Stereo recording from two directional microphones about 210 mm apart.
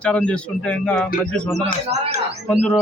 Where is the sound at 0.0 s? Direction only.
5° left (ahead or behind).